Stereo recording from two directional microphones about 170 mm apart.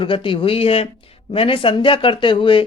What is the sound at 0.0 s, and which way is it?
Speech, 30° left (ahead or behind).